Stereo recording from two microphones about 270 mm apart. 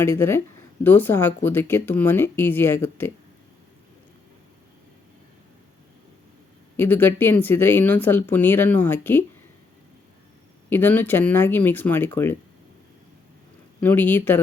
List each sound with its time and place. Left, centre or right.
0.0 s speech: centre
6.7 s speech: centre
10.7 s speech: centre
13.8 s speech: centre